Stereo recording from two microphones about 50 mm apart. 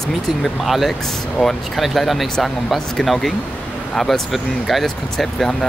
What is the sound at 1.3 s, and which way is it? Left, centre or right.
Speech, centre.